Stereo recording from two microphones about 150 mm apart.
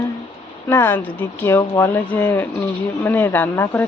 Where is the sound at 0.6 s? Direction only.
15° left (ahead or behind).